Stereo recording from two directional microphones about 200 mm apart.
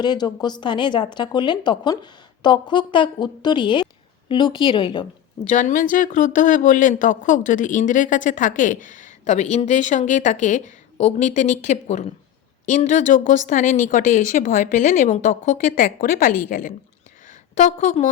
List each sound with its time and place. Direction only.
0.0 s a woman's voice: 20° left (ahead or behind)
5.5 s speech: 40° left (ahead or behind)